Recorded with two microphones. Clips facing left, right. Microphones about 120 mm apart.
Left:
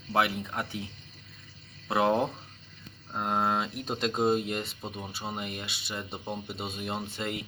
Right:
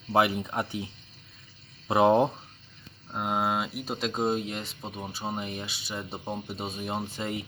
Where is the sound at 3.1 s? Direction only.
5° right (ahead or behind).